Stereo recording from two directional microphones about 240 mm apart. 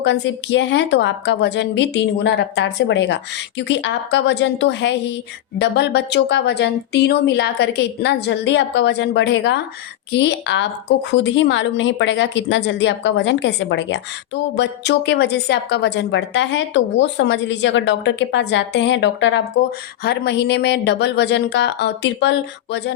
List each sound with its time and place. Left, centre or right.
0.0 s speech: left